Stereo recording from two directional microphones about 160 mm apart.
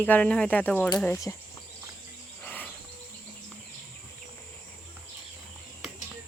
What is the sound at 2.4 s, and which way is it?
Cricket, 10° left (ahead or behind).